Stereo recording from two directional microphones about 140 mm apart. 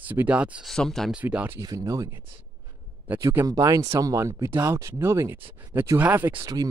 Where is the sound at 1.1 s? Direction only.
10° right (ahead or behind).